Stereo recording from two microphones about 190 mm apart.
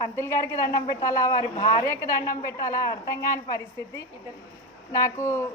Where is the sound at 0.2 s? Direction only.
15° left (ahead or behind).